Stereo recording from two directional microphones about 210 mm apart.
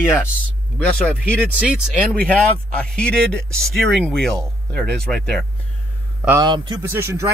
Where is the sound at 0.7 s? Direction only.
5° left (ahead or behind).